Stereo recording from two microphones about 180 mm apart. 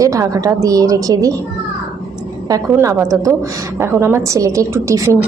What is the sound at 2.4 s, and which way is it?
A woman's voice, 20° right (ahead or behind).